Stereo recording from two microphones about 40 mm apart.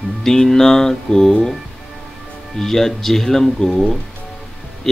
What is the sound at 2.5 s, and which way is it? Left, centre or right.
Speech, centre.